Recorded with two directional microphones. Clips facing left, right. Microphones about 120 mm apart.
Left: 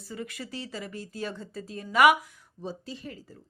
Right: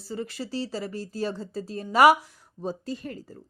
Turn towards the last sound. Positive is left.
turn(degrees=-45)  # may be behind; listen again after turning